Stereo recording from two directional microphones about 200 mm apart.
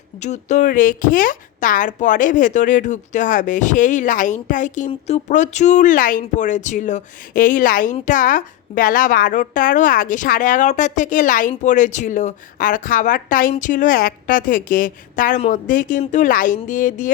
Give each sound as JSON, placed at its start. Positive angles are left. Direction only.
{"t": 0.2, "sound": "a woman's voice", "side_deg": 35}